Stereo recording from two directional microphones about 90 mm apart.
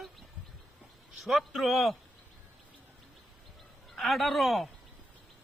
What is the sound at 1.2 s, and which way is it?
Speech, centre (ahead or behind).